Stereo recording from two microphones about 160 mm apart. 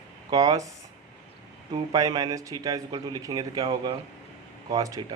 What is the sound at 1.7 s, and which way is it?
A man's voice, 25° right (ahead or behind).